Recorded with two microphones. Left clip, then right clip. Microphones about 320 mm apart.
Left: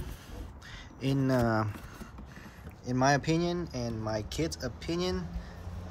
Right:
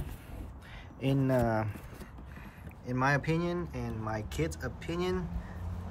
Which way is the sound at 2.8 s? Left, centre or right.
Centre.